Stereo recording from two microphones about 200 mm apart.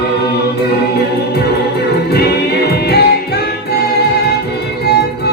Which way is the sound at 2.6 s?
50° left (ahead or behind).